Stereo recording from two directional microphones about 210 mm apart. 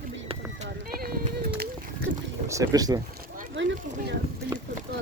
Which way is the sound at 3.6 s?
60° right (ahead or behind).